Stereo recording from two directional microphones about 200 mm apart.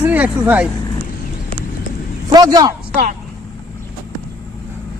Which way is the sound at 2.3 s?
20° right (ahead or behind).